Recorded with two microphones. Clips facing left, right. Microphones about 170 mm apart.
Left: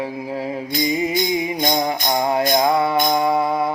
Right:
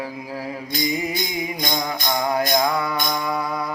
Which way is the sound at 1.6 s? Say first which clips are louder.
Left 5 dB; 25° left (ahead or behind).